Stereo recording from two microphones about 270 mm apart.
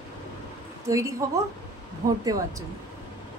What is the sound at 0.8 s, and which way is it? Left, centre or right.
Speech, centre.